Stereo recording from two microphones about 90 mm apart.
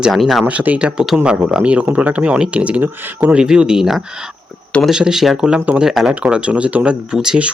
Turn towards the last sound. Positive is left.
turn(degrees=-5)  # may be behind; listen again after turning